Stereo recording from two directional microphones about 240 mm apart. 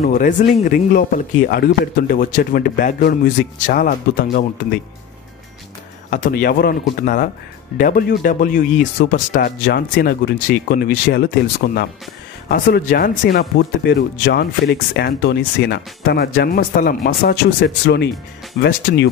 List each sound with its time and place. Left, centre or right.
0.0 s speech: left
6.0 s speech: left